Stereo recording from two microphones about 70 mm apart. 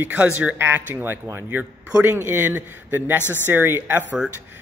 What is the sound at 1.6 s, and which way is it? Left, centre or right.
Speech, right.